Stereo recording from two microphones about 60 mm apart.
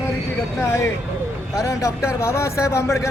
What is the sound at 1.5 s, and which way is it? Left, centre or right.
Speech, left.